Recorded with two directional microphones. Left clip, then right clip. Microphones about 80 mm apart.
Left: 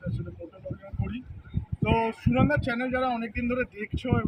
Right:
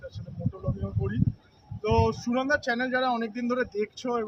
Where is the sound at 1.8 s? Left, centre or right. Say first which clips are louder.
Right 1 dB; right.